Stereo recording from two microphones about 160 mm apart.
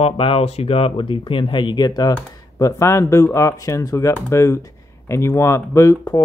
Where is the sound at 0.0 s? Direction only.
35° left (ahead or behind).